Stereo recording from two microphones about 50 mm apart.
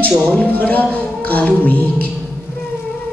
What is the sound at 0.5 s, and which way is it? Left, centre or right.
Speech, left.